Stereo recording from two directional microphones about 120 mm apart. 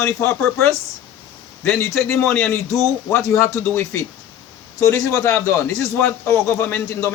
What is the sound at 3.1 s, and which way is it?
A man's voice, 25° left (ahead or behind).